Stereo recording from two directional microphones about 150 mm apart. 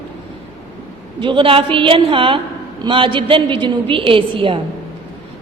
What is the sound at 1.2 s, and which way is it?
A woman's voice, 35° right (ahead or behind).